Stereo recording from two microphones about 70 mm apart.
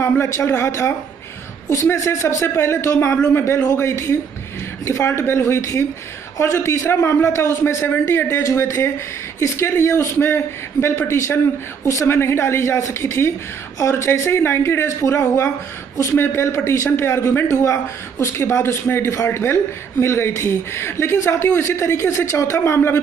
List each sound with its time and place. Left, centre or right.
0.0 s a woman's voice: left
11.8 s a woman's voice: left
12.1 s a woman's voice: left